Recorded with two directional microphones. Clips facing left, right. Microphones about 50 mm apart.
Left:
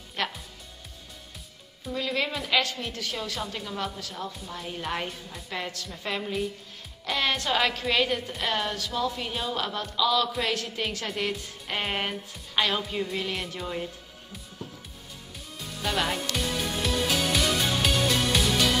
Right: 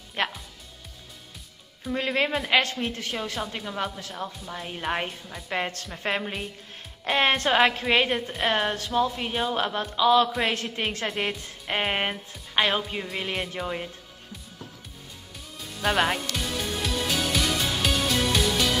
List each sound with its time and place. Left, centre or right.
0.2 s music: right
1.9 s a woman's voice: right
3.3 s speech: centre
5.5 s a woman's voice: right
15.8 s speech: right
16.3 s music: centre